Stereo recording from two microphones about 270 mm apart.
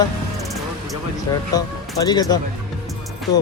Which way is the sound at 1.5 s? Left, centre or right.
Centre.